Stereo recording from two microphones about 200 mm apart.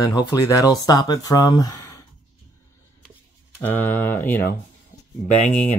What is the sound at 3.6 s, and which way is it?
Speech, 10° left (ahead or behind).